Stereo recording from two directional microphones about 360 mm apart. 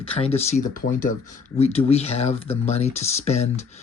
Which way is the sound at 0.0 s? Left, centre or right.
Centre.